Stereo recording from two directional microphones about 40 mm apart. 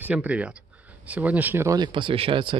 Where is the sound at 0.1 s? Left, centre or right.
Right.